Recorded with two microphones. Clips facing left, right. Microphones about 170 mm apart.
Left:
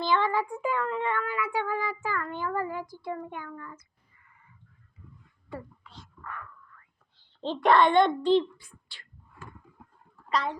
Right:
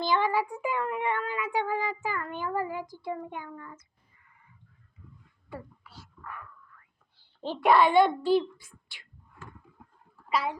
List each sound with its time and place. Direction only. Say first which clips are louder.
0.0 s speech: even; 15° right (ahead or behind)
5.5 s whispering: left 2 dB; 10° right (ahead or behind)
10.2 s speech: even; 10° right (ahead or behind)